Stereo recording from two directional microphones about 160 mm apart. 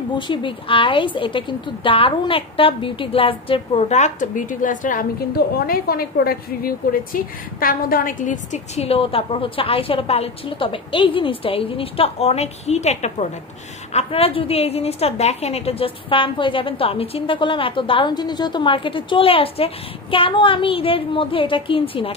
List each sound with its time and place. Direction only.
0.1 s a woman's voice: 30° left (ahead or behind)